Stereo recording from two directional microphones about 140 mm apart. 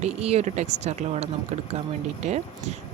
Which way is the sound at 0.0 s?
50° right (ahead or behind).